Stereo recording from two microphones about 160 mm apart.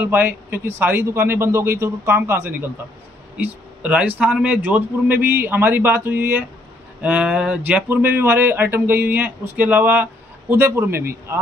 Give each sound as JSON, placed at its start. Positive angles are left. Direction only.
{"t": 0.0, "sound": "speech", "side_deg": -10}